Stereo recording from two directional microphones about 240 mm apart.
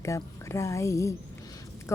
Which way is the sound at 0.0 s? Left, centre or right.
Centre.